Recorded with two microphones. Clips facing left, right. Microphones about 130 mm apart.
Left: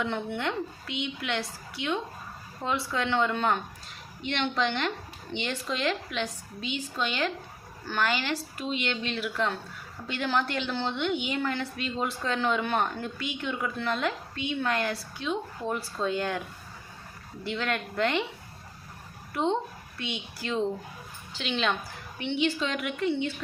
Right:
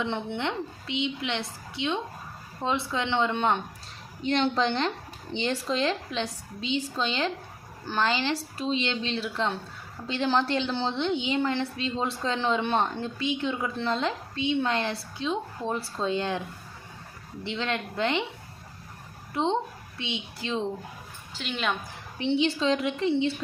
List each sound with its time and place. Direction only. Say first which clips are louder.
0.0 s a woman's voice: right 1 dB; 25° right (ahead or behind)
4.2 s a woman's voice: right 4 dB; 35° right (ahead or behind)
17.4 s a woman's voice: even; 20° right (ahead or behind)
19.3 s a woman's voice: right 1 dB; 25° right (ahead or behind)
21.3 s a woman's voice: left 1 dB; 5° right (ahead or behind)
22.2 s a woman's voice: right 3 dB; 30° right (ahead or behind)